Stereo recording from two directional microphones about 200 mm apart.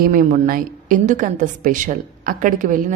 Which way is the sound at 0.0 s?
45° right (ahead or behind).